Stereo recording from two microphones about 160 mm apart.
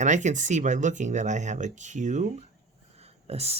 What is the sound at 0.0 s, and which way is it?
Speech, 50° right (ahead or behind).